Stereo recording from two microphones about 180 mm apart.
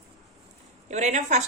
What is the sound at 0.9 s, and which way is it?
Speech, 40° right (ahead or behind).